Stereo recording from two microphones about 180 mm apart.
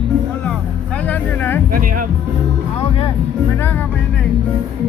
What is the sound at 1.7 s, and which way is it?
Speech, 50° right (ahead or behind).